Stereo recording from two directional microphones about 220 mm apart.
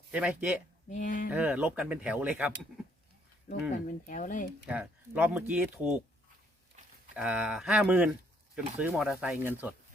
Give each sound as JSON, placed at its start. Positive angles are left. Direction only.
{"t": 0.1, "sound": "speech", "side_deg": -5}
{"t": 0.9, "sound": "speech", "side_deg": 35}
{"t": 1.3, "sound": "speech", "side_deg": -5}
{"t": 3.5, "sound": "speech", "side_deg": 30}
{"t": 4.6, "sound": "speech", "side_deg": -5}
{"t": 7.2, "sound": "speech", "side_deg": -5}